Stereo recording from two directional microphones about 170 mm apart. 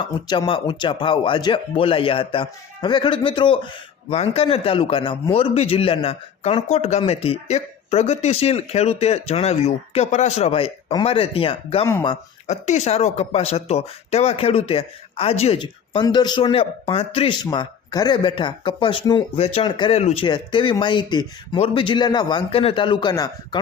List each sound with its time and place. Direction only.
0.0 s speech: 30° left (ahead or behind)